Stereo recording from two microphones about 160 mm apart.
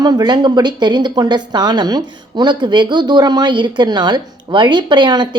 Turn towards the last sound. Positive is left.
turn(degrees=-25)  # may be behind; listen again after turning